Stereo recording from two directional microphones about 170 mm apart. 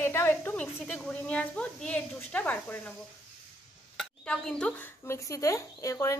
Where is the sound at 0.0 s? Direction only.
15° left (ahead or behind).